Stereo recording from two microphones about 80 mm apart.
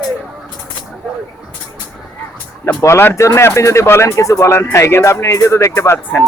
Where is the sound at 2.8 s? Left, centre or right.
Left.